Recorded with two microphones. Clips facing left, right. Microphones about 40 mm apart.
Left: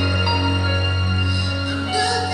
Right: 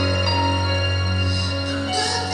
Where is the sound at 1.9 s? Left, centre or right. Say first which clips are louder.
Left 5 dB; centre.